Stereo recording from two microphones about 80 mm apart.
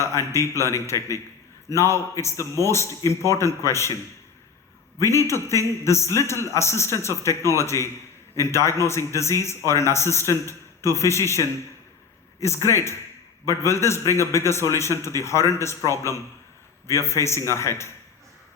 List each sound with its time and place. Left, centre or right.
0.0 s a man's voice: left
4.9 s a man's voice: left